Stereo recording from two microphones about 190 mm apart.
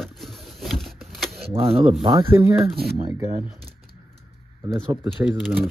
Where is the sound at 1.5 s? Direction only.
30° right (ahead or behind).